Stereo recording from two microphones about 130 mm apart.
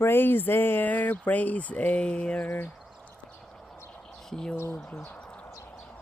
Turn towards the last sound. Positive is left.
turn(degrees=20)  # may be behind; listen again after turning